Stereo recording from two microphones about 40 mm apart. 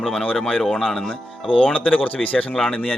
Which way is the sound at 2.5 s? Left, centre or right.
Centre.